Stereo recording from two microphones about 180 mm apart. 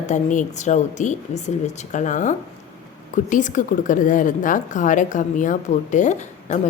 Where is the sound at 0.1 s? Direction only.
45° left (ahead or behind).